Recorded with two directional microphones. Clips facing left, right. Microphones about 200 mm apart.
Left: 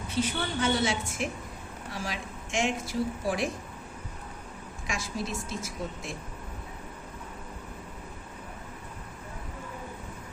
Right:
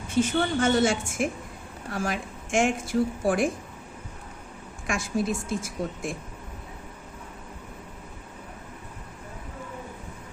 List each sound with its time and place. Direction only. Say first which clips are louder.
0.1 s speech: right 7 dB; 50° right (ahead or behind)
4.9 s speech: right 7 dB; 50° right (ahead or behind)